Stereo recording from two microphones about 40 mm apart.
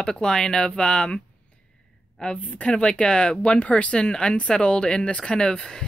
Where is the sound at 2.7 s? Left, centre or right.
Left.